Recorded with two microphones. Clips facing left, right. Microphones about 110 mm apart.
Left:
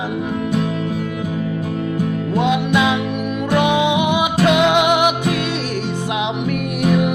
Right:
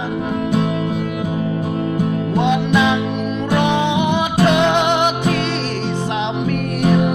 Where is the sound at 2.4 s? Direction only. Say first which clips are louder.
Even; 5° left (ahead or behind).